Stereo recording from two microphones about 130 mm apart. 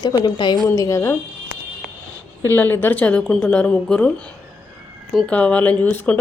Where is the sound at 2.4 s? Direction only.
15° left (ahead or behind).